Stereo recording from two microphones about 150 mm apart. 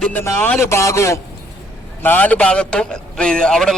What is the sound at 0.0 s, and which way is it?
A man's voice, 10° left (ahead or behind).